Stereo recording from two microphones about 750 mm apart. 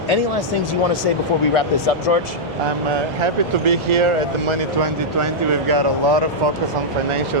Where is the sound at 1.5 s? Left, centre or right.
Left.